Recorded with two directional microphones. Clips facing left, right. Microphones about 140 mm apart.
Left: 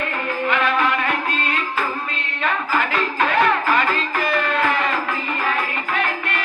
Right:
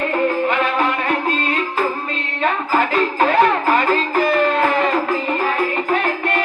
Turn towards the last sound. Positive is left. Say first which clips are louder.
# right 4 dB
turn(degrees=-35)  # may be behind; listen again after turning